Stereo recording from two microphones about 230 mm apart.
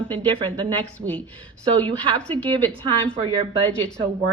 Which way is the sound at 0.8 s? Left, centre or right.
Centre.